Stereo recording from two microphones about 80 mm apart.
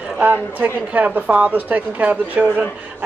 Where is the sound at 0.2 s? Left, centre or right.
Right.